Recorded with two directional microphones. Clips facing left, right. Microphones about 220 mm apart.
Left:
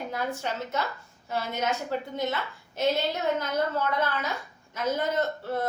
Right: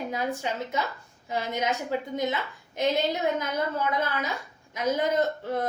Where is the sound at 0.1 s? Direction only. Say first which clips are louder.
Right 2 dB; 15° right (ahead or behind).